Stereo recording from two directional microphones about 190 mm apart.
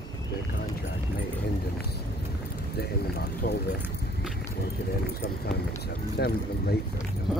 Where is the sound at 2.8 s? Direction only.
55° left (ahead or behind).